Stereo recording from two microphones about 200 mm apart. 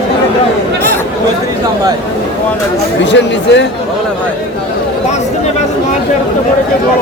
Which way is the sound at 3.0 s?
60° left (ahead or behind).